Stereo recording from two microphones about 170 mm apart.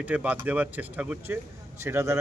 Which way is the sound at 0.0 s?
10° right (ahead or behind).